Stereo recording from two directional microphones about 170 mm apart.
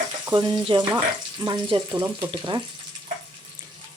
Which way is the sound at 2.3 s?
30° right (ahead or behind).